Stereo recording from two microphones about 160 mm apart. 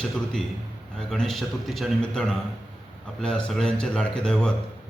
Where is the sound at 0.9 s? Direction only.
5° left (ahead or behind).